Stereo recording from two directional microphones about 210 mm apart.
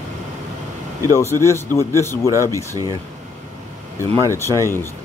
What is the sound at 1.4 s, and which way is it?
Speech, 15° left (ahead or behind).